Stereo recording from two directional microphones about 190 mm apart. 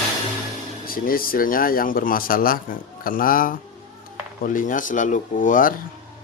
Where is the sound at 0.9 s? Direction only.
50° left (ahead or behind).